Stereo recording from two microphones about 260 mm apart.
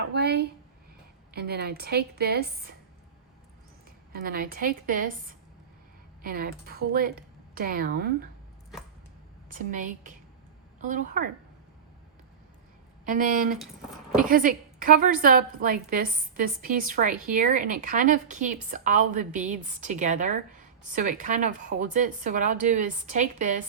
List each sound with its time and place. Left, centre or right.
0.1 s a woman's voice: right
4.1 s a woman's voice: right
6.2 s a woman's voice: right
9.5 s a woman's voice: right
13.1 s a woman's voice: right